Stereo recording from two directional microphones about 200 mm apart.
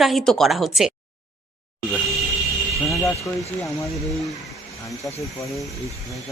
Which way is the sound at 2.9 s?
15° left (ahead or behind).